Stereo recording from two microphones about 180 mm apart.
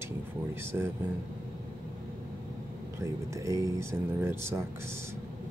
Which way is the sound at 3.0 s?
15° right (ahead or behind).